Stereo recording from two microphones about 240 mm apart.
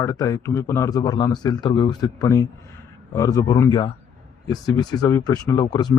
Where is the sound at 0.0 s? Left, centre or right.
Centre.